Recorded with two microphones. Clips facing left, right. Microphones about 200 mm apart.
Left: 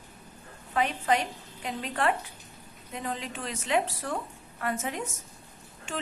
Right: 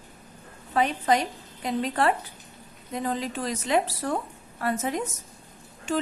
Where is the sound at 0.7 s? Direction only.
35° right (ahead or behind).